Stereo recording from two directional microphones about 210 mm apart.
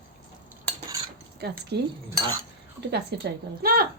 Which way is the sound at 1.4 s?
50° right (ahead or behind).